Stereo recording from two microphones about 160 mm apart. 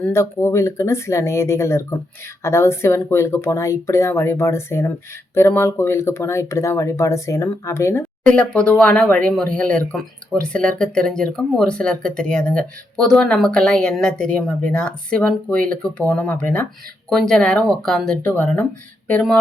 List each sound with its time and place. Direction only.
0.0 s speech: 15° left (ahead or behind)